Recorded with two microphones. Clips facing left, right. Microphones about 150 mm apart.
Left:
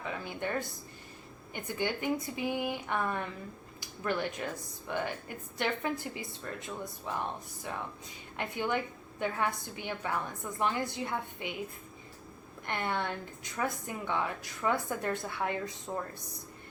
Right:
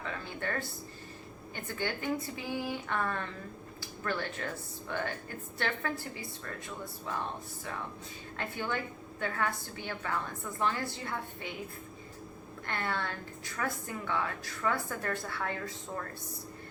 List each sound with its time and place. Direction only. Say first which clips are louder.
0.0 s a sound: left 1 dB; 15° left (ahead or behind)
1.5 s a woman's voice: left 2 dB; 15° left (ahead or behind)
8.4 s a woman's voice: left 3 dB; 15° left (ahead or behind)
12.6 s a woman's voice: left 2 dB; 20° left (ahead or behind)